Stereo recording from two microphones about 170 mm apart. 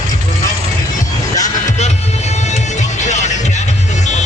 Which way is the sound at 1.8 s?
40° left (ahead or behind).